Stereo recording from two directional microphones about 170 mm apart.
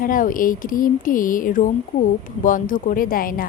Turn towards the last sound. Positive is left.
turn(degrees=55)  # may be behind; listen again after turning